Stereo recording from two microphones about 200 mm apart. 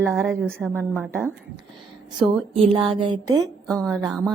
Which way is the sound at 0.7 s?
10° right (ahead or behind).